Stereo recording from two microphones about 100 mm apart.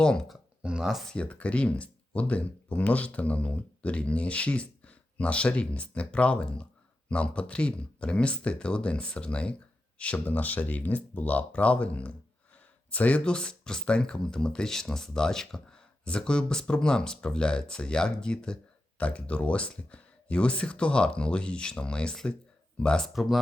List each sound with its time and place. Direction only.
0.0 s speech: 10° left (ahead or behind)
0.6 s speech: 10° right (ahead or behind)
1.1 s speech: 15° left (ahead or behind)